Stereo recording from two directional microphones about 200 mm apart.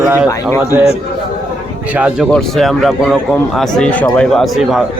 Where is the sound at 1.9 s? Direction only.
5° right (ahead or behind).